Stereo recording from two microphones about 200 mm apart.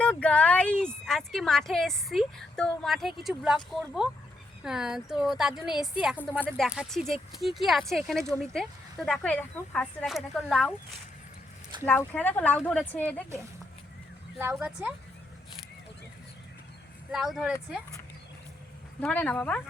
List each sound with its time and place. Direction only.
0.0 s speech: 5° left (ahead or behind)
11.9 s speech: 5° left (ahead or behind)
14.3 s a woman's voice: 10° right (ahead or behind)
17.1 s speech: centre (ahead or behind)
18.9 s speech: 5° left (ahead or behind)